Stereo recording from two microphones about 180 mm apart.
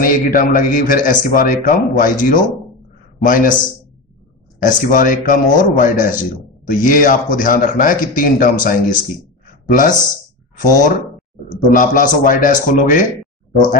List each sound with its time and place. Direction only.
0.0 s a man's voice: 50° left (ahead or behind)
4.6 s a man's voice: 45° left (ahead or behind)